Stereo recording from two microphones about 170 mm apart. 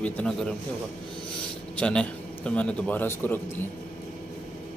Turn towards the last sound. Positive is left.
turn(degrees=10)  # may be behind; listen again after turning